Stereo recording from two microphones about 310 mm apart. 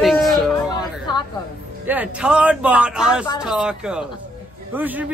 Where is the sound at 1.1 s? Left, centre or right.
Centre.